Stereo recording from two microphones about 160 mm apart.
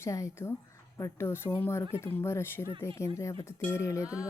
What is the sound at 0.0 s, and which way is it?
A woman's voice, 20° left (ahead or behind).